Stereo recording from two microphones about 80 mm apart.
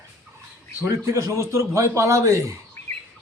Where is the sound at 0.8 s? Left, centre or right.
Right.